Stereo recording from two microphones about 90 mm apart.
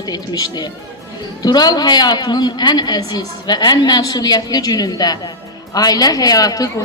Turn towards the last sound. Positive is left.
turn(degrees=40)  # may be behind; listen again after turning